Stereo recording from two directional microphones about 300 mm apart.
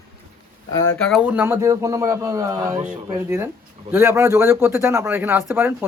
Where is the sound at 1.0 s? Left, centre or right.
Centre.